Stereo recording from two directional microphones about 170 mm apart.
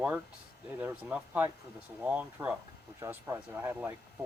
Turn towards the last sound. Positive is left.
turn(degrees=-15)  # may be behind; listen again after turning